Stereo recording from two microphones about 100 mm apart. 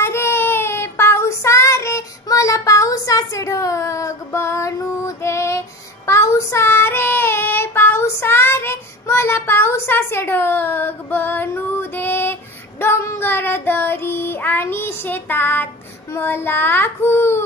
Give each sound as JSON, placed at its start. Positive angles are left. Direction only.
{"t": 0.0, "sound": "child singing", "side_deg": 25}